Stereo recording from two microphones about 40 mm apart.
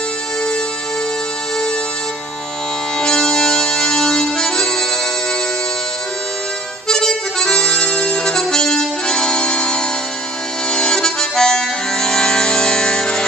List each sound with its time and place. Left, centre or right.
3.0 s music: centre
6.9 s accordion: centre
10.7 s music: centre